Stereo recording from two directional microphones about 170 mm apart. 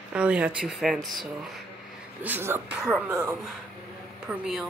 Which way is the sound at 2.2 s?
10° right (ahead or behind).